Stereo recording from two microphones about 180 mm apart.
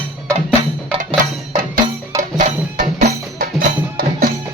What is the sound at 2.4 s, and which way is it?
Music, 40° right (ahead or behind).